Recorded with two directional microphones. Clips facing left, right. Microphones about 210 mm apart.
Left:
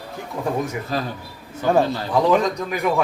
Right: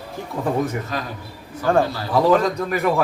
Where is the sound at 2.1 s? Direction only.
5° right (ahead or behind).